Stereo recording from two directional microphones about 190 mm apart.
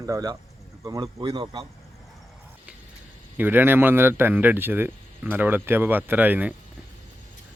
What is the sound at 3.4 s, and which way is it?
Speech, 10° right (ahead or behind).